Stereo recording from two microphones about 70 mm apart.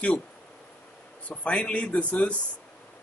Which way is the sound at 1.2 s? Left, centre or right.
Centre.